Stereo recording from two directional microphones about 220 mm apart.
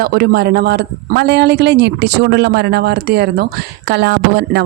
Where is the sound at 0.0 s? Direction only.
50° right (ahead or behind).